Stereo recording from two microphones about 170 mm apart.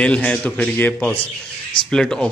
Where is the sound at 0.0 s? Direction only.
5° left (ahead or behind).